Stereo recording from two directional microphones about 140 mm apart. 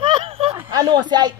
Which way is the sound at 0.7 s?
30° right (ahead or behind).